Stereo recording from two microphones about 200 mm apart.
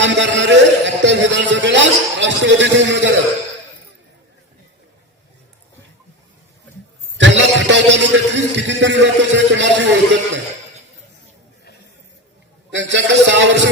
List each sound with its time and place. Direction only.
0.0 s a man's voice: 65° right (ahead or behind)
7.2 s a man's voice: 65° right (ahead or behind)
12.7 s a man's voice: 65° right (ahead or behind)